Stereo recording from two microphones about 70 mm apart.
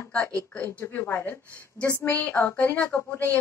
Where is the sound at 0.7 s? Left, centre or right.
Left.